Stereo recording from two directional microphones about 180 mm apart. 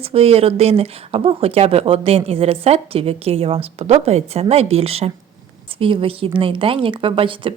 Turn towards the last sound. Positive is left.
turn(degrees=-30)  # may be behind; listen again after turning